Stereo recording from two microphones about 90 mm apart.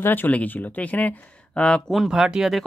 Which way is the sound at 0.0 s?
20° left (ahead or behind).